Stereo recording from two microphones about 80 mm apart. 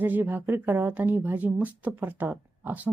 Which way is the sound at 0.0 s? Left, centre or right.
Right.